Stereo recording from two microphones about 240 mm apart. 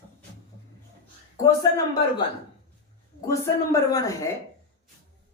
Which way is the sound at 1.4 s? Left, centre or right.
Centre.